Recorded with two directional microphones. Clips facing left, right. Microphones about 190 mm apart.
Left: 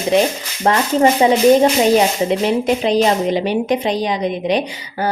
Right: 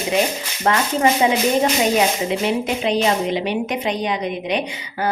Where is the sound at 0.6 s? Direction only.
30° left (ahead or behind).